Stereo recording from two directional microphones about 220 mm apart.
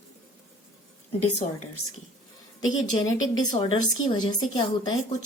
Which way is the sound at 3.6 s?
20° left (ahead or behind).